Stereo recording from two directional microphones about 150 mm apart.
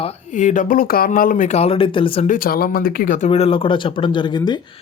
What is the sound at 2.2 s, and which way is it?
Speech, 65° left (ahead or behind).